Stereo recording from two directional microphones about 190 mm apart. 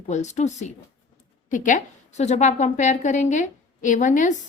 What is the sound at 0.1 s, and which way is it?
A woman's voice, 35° left (ahead or behind).